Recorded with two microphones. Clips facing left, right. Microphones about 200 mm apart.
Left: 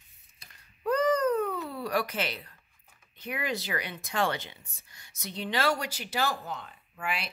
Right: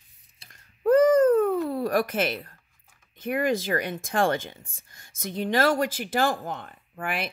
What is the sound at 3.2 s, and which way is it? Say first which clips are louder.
Speech: right 9 dB; 50° right (ahead or behind).